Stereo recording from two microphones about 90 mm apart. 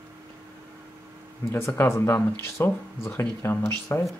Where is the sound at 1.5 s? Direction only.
30° left (ahead or behind).